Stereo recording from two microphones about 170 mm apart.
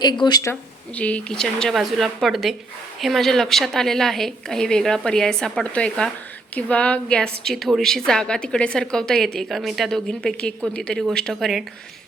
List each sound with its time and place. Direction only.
0.0 s speech: 25° left (ahead or behind)
0.9 s a woman's voice: 10° left (ahead or behind)